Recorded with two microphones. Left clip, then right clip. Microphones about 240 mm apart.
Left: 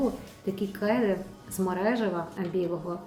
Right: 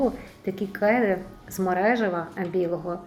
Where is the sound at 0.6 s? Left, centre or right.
Centre.